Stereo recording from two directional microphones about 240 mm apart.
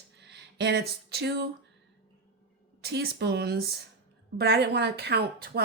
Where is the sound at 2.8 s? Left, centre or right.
Right.